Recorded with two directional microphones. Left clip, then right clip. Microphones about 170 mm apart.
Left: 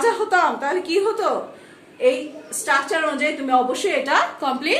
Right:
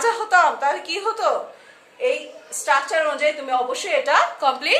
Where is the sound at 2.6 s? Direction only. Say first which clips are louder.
Right 1 dB; 25° right (ahead or behind).